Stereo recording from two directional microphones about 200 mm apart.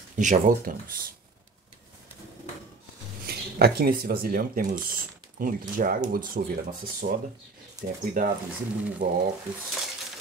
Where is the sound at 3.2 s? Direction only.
50° right (ahead or behind).